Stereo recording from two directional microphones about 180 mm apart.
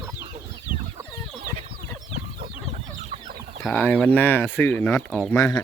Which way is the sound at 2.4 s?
35° right (ahead or behind).